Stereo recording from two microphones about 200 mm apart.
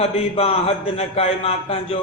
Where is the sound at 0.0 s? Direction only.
30° left (ahead or behind).